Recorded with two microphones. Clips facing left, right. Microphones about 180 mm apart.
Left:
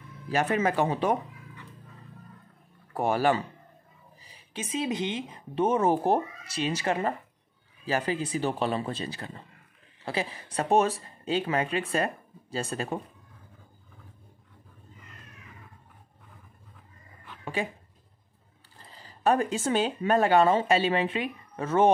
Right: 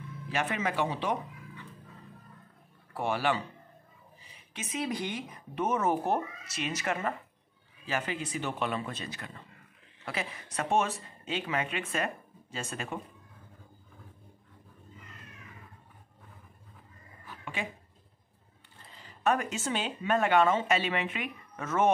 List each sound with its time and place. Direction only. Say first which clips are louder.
0.3 s speech: left 6 dB; 40° left (ahead or behind)
2.9 s speech: left 5 dB; 40° left (ahead or behind)
18.9 s a sound: left 4 dB; 35° left (ahead or behind)
19.6 s speech: left 7 dB; 40° left (ahead or behind)